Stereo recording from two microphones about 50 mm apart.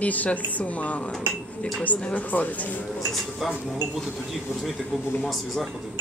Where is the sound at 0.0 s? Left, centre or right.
Left.